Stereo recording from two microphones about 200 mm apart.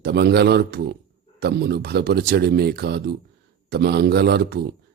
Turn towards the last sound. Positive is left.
turn(degrees=-55)  # may be behind; listen again after turning